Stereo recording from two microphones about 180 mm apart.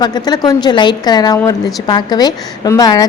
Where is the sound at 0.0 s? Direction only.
20° left (ahead or behind).